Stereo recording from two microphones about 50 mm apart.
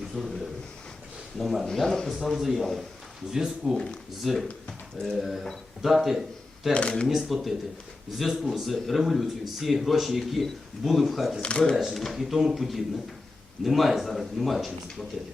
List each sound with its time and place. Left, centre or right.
0.1 s a man's voice: centre
1.4 s speech: centre
1.6 s speech: centre
6.7 s speech: centre
7.1 s speech: centre
11.4 s speech: centre
11.7 s speech: centre